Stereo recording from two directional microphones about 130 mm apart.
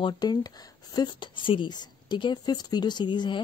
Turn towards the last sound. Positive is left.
turn(degrees=35)  # may be behind; listen again after turning